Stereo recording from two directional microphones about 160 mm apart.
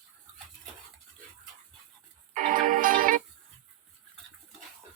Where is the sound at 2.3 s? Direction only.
55° right (ahead or behind).